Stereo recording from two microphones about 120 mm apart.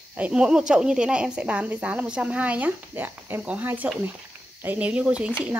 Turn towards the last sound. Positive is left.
turn(degrees=-10)  # may be behind; listen again after turning